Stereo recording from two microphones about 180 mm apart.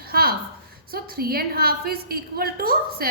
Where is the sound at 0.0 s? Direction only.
55° right (ahead or behind).